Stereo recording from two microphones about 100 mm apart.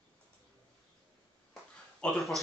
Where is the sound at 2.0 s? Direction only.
10° left (ahead or behind).